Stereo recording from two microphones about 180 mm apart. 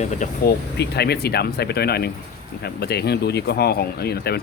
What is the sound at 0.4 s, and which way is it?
Speech, 65° left (ahead or behind).